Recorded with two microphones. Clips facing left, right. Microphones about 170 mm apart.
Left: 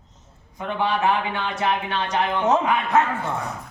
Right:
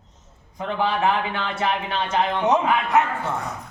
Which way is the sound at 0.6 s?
35° right (ahead or behind).